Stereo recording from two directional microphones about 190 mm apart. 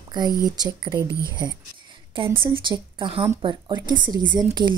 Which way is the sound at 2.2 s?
25° right (ahead or behind).